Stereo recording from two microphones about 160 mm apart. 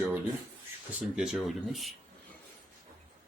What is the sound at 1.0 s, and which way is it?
Speech, 5° right (ahead or behind).